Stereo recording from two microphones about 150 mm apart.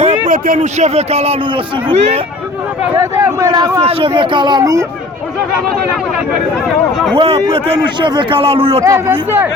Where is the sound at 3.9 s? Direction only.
40° right (ahead or behind).